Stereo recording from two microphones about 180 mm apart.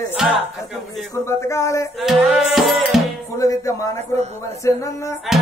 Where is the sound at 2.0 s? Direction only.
Centre (ahead or behind).